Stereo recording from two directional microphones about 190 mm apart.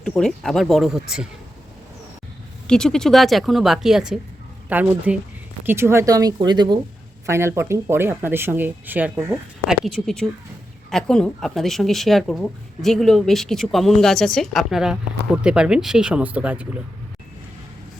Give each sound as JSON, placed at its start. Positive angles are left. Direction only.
{"t": 0.0, "sound": "a woman's voice", "side_deg": 5}
{"t": 2.6, "sound": "a woman's voice", "side_deg": 5}
{"t": 9.6, "sound": "a woman's voice", "side_deg": 0}